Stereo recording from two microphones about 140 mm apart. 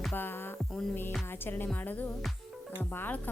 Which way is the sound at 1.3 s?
15° left (ahead or behind).